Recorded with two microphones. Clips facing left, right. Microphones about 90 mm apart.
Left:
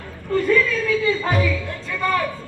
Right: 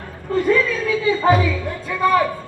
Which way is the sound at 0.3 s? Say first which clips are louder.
Right 1 dB; 20° right (ahead or behind).